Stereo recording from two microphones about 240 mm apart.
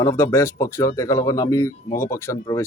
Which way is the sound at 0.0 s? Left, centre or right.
Centre.